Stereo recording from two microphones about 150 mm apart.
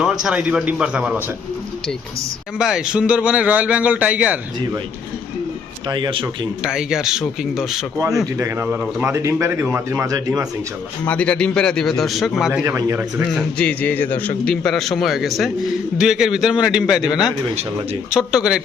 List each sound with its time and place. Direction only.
0.0 s speech: 5° right (ahead or behind)
2.6 s speech: 5° right (ahead or behind)
5.9 s speech: 30° right (ahead or behind)
6.7 s a man's voice: 5° right (ahead or behind)
7.9 s a man's voice: 20° right (ahead or behind)
11.0 s a man's voice: 10° left (ahead or behind)
12.6 s a man's voice: 20° right (ahead or behind)
13.6 s a man's voice: 10° left (ahead or behind)
18.1 s a man's voice: 5° right (ahead or behind)